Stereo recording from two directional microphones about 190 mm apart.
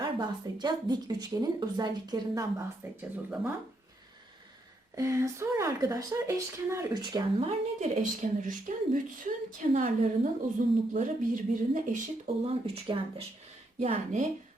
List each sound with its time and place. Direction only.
0.0 s speech: 20° right (ahead or behind)
4.9 s speech: 15° right (ahead or behind); by 12.0 s 45° right (ahead or behind)
12.5 s speech: 30° right (ahead or behind)